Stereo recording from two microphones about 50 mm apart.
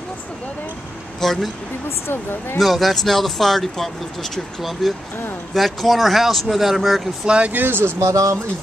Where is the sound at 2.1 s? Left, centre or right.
Left.